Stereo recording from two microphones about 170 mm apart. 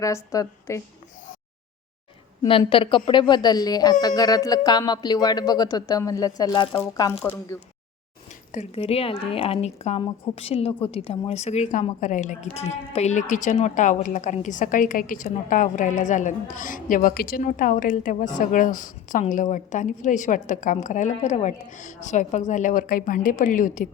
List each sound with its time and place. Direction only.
0.0 s speech: 20° left (ahead or behind)
2.5 s a woman's voice: 30° left (ahead or behind)
8.5 s a woman's voice: 35° left (ahead or behind); by 23.9 s 50° left (ahead or behind)